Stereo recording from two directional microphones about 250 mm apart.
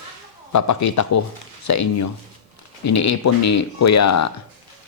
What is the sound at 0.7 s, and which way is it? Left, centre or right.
Speech, left.